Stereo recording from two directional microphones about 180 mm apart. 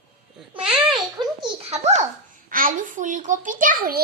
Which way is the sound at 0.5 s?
30° right (ahead or behind).